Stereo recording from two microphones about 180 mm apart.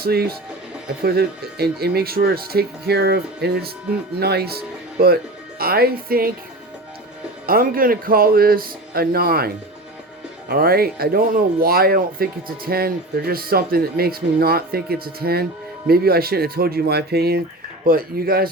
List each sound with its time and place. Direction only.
0.0 s speech: 60° right (ahead or behind)
7.4 s speech: 55° right (ahead or behind)
10.5 s speech: 55° right (ahead or behind)